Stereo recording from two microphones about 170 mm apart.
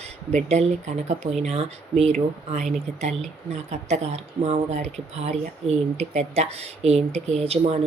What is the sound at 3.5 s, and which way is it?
Speech, 40° right (ahead or behind).